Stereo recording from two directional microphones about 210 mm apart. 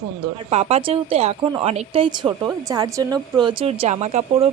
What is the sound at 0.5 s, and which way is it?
Speech, 30° right (ahead or behind).